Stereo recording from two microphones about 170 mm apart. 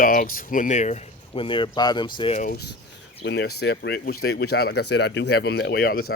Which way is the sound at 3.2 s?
75° left (ahead or behind).